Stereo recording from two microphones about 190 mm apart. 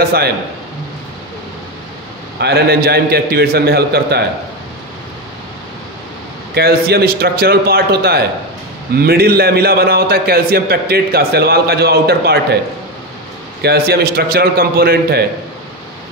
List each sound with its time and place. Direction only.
0.0 s a man's voice: 55° right (ahead or behind)
2.4 s a man's voice: 55° right (ahead or behind)
6.5 s a man's voice: 55° right (ahead or behind)
13.6 s a man's voice: 55° right (ahead or behind)